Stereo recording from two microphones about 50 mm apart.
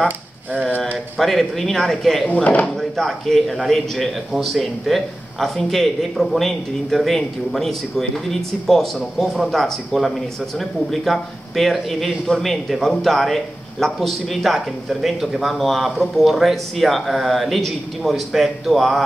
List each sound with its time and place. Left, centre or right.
1.1 s a man's voice: centre
2.2 s speech: left
3.0 s a man's voice: centre